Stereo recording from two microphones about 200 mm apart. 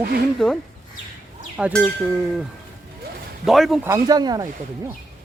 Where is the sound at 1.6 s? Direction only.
5° right (ahead or behind).